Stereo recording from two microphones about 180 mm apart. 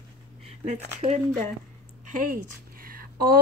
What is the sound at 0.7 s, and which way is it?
A woman's voice, 40° right (ahead or behind).